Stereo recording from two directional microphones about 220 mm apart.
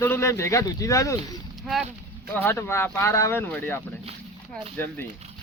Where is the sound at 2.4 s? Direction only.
10° left (ahead or behind).